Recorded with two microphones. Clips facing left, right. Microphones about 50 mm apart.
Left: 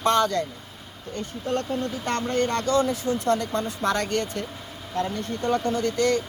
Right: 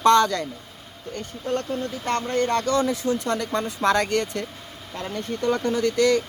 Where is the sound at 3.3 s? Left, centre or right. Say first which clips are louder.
Even; right.